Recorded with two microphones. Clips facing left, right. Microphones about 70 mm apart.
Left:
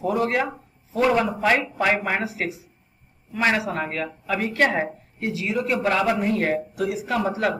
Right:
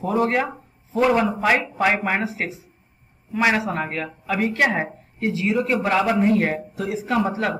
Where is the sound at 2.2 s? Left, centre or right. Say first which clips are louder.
Right 1 dB; right.